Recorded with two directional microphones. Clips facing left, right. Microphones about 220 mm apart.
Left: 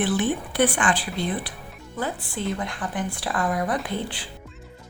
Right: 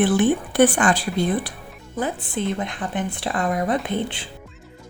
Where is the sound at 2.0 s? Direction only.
20° right (ahead or behind).